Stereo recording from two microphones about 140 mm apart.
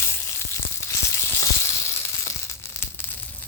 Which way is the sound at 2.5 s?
20° left (ahead or behind).